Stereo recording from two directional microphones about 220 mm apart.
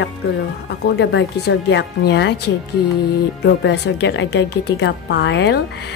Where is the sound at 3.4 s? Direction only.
50° left (ahead or behind).